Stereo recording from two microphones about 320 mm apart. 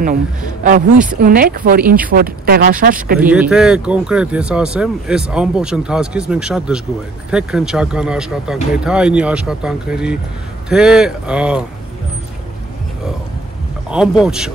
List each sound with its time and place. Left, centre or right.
1.2 s speech: right
3.2 s speech: centre
13.8 s speech: centre